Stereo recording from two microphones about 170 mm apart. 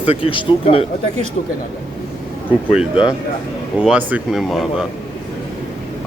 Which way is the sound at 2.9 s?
25° left (ahead or behind).